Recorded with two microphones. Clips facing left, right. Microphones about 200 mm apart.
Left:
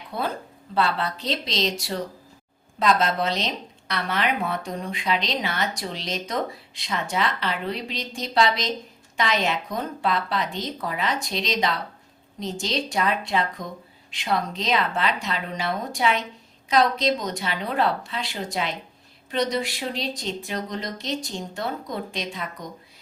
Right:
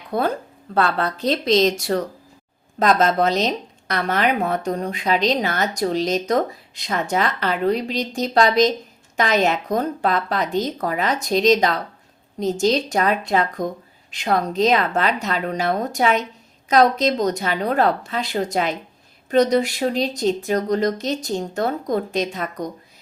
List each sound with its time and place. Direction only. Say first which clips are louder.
0.1 s a woman's voice: right 7 dB; 45° right (ahead or behind)